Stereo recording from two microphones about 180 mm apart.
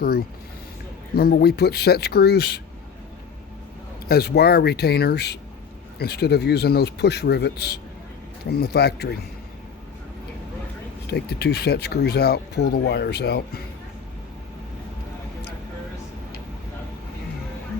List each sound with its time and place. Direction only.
0.0 s speech: 60° left (ahead or behind)
4.1 s speech: 65° left (ahead or behind)
11.1 s speech: 65° left (ahead or behind)